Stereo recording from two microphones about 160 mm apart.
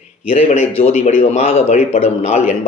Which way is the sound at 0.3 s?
40° left (ahead or behind).